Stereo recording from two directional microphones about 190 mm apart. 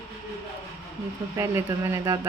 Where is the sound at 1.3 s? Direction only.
15° right (ahead or behind).